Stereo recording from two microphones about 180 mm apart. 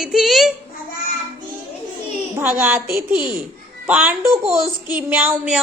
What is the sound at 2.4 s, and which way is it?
A woman's voice, 10° right (ahead or behind).